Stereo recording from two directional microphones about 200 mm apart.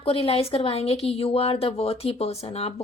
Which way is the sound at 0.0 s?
30° left (ahead or behind).